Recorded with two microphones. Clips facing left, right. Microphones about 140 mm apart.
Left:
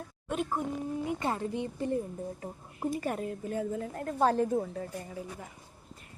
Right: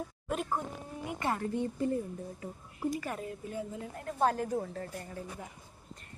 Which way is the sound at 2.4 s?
45° left (ahead or behind).